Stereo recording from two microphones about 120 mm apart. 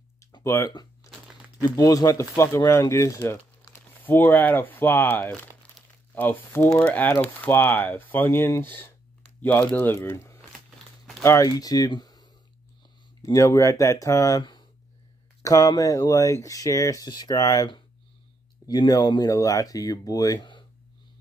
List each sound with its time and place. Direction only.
0.4 s speech: 25° left (ahead or behind)
0.7 s a sound: 35° left (ahead or behind)
1.6 s speech: 30° left (ahead or behind)
18.7 s speech: 30° left (ahead or behind)